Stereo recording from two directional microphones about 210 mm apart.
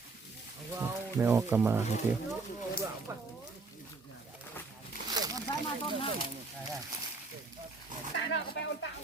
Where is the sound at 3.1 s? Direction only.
15° right (ahead or behind).